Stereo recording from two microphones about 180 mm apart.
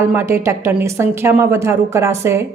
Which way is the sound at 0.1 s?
15° right (ahead or behind).